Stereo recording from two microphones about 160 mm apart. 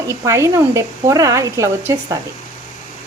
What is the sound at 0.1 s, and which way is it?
Speech, 20° right (ahead or behind).